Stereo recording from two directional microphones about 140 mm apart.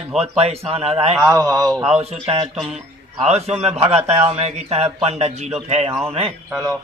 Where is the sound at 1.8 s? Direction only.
45° right (ahead or behind).